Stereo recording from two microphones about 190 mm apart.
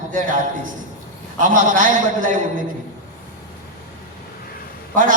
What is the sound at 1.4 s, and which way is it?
Speech, 45° right (ahead or behind).